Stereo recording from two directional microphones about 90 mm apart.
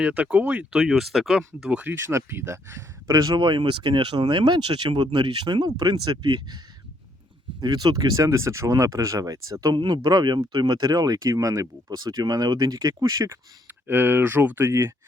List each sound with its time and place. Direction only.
0.0 s speech: 15° right (ahead or behind)
1.7 s speech: 20° right (ahead or behind)
3.1 s speech: 45° right (ahead or behind)
7.6 s speech: 50° right (ahead or behind)
9.7 s speech: 55° right (ahead or behind); by 13.3 s 40° right (ahead or behind)
13.8 s speech: 25° right (ahead or behind)